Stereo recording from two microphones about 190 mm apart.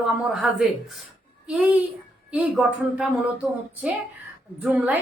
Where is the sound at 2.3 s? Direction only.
5° right (ahead or behind).